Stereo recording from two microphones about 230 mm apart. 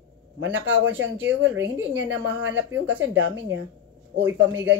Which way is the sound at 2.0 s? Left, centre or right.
Right.